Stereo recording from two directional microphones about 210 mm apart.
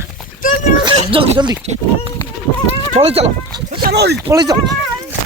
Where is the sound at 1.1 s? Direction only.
25° right (ahead or behind).